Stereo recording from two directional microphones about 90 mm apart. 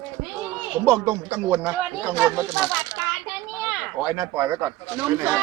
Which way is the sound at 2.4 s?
40° right (ahead or behind).